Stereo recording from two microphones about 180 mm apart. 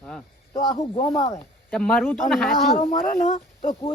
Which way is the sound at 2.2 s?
Centre (ahead or behind).